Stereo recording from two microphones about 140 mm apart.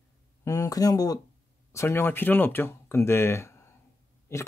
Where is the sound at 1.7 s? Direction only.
15° left (ahead or behind).